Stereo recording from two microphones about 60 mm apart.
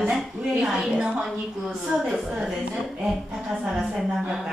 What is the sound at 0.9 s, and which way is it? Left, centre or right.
Speech, right.